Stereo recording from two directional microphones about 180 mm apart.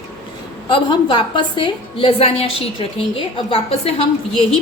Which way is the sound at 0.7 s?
25° left (ahead or behind).